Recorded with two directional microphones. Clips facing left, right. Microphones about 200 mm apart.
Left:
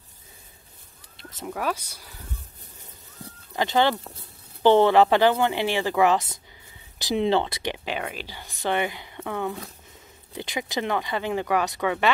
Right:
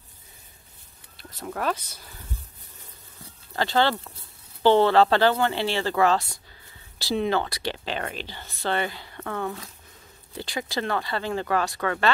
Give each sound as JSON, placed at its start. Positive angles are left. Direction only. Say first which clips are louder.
{"t": 1.1, "sound": "a sound", "louder": "left 1 dB", "side_deg": 20}
{"t": 1.5, "sound": "speech", "louder": "right 1 dB", "side_deg": 10}
{"t": 3.5, "sound": "speech", "louder": "left 1 dB", "side_deg": 15}